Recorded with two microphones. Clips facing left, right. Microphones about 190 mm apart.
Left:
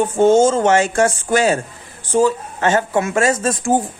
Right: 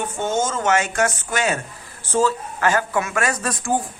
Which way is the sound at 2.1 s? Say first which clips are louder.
Left 4 dB; 15° left (ahead or behind).